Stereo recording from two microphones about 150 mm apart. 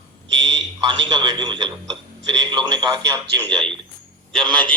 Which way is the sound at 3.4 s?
5° left (ahead or behind).